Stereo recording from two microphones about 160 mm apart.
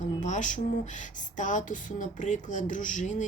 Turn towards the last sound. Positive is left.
turn(degrees=50)  # may be behind; listen again after turning